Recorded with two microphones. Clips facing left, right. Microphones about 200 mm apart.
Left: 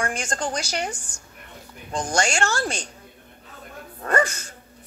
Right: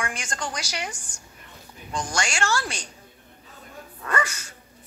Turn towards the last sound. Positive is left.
turn(degrees=50)  # may be behind; listen again after turning